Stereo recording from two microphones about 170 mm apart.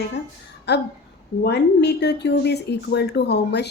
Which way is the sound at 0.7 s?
80° left.